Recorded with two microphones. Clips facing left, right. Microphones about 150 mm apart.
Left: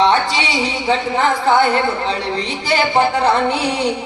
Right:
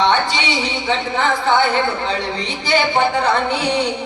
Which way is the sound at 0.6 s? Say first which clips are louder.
Left 3 dB; 40° left (ahead or behind).